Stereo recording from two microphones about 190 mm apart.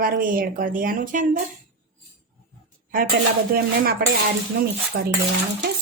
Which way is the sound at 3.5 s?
55° right (ahead or behind).